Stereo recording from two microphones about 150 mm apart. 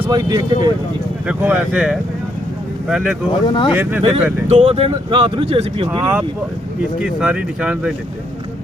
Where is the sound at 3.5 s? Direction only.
30° left (ahead or behind).